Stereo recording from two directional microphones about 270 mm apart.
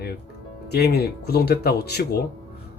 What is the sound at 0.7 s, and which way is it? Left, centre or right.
Speech, left.